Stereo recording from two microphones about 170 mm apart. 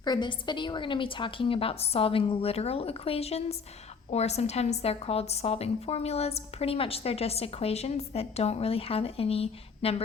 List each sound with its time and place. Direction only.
0.0 s a woman's voice: 25° left (ahead or behind)